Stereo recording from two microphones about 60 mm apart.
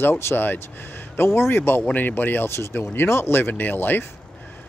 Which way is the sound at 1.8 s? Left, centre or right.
Left.